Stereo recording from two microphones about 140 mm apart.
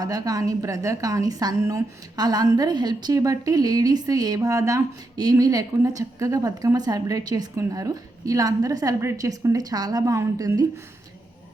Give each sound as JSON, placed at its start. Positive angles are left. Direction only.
{"t": 0.0, "sound": "a woman's voice", "side_deg": -25}